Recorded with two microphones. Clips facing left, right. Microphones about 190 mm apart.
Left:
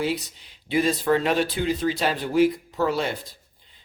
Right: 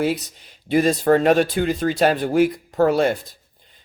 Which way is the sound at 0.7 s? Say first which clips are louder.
Right 5 dB; 45° right (ahead or behind).